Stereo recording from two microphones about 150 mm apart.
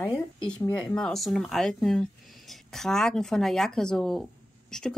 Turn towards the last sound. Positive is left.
turn(degrees=5)  # may be behind; listen again after turning